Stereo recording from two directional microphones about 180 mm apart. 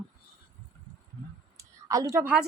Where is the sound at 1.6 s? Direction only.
20° right (ahead or behind).